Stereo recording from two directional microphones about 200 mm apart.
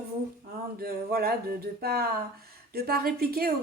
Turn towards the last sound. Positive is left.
turn(degrees=-50)  # may be behind; listen again after turning